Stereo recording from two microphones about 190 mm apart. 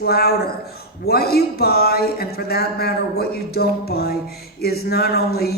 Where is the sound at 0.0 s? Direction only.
55° left (ahead or behind).